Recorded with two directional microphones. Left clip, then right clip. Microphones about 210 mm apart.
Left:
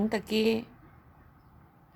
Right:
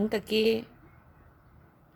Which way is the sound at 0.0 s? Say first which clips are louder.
Right 2 dB; centre (ahead or behind).